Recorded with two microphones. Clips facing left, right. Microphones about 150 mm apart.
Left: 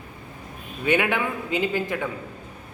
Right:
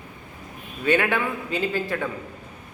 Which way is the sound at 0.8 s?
15° left (ahead or behind).